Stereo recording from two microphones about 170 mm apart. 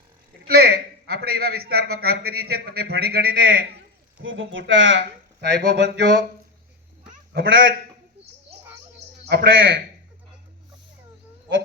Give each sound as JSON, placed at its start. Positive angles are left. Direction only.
{"t": 0.4, "sound": "a man's voice", "side_deg": -65}
{"t": 4.2, "sound": "speech", "side_deg": -90}
{"t": 7.3, "sound": "a man's voice", "side_deg": -60}
{"t": 9.3, "sound": "a man's voice", "side_deg": -65}